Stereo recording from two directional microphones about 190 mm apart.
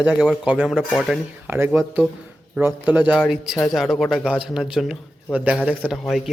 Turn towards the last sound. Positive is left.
turn(degrees=0)  # may be behind; listen again after turning